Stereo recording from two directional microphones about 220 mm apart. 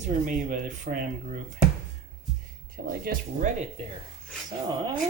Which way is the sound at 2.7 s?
40° right (ahead or behind).